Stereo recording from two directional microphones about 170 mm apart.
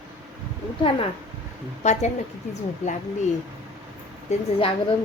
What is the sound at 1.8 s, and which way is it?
Speech, 40° left (ahead or behind).